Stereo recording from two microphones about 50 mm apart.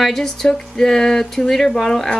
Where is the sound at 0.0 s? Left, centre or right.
Centre.